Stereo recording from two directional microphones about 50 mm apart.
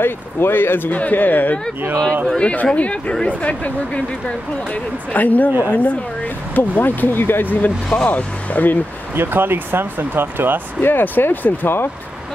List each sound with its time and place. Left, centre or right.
0.0 s speech: left
2.2 s speech: left
5.1 s speech: left
5.7 s speech: left
6.5 s speech: left
8.0 s speech: left
9.1 s speech: right
10.8 s speech: left